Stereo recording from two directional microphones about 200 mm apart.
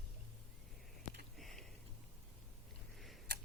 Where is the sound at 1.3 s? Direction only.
Centre (ahead or behind).